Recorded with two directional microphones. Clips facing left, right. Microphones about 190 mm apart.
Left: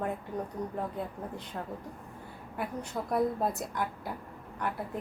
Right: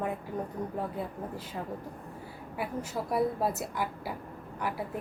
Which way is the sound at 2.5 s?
5° right (ahead or behind).